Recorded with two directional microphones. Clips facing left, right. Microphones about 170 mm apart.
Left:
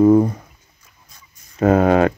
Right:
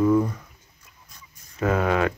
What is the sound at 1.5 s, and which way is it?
Speech, 35° left (ahead or behind).